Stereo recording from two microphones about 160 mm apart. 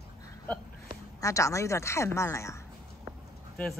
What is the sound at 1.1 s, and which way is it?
A woman's voice, 20° left (ahead or behind).